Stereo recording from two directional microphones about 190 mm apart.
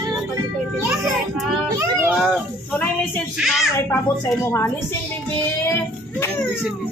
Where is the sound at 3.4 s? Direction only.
Centre (ahead or behind).